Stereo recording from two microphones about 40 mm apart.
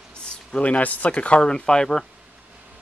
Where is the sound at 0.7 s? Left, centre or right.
Left; by 2.0 s centre.